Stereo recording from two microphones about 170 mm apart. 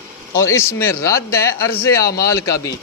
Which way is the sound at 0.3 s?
15° left (ahead or behind).